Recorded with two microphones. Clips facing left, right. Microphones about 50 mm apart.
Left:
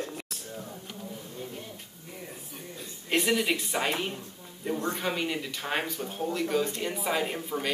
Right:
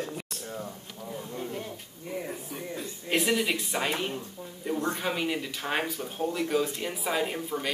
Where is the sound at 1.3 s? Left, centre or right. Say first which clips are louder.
Right 4 dB; right.